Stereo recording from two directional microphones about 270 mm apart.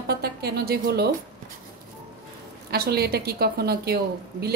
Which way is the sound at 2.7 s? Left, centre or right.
Right.